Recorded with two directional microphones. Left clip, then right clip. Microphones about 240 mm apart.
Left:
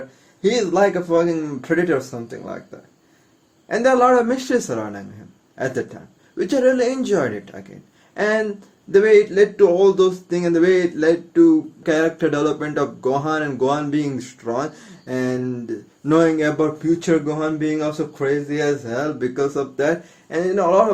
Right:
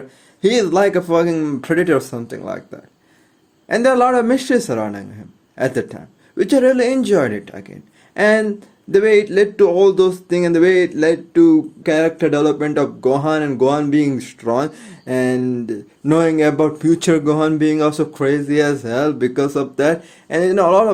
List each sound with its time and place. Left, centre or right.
0.4 s speech: right
3.7 s speech: right
11.8 s speech: right